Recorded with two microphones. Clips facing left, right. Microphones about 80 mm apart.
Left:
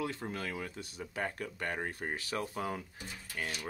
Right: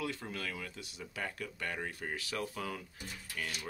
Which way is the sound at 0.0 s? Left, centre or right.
Left.